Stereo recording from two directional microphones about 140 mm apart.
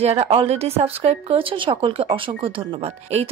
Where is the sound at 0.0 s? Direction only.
45° right (ahead or behind).